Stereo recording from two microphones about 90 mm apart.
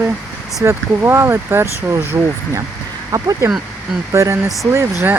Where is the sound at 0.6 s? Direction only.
30° right (ahead or behind).